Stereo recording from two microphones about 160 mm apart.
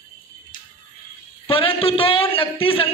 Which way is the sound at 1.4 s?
35° left (ahead or behind).